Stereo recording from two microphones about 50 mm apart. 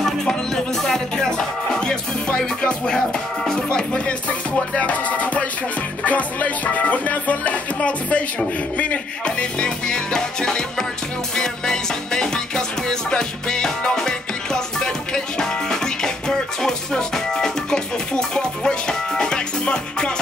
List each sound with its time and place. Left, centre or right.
0.0 s music: centre
4.7 s music: left